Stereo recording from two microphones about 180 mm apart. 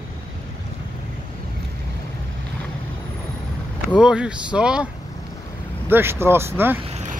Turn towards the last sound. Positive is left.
turn(degrees=-40)  # may be behind; listen again after turning